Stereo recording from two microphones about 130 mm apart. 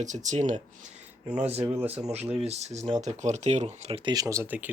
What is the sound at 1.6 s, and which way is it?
Speech, 20° right (ahead or behind).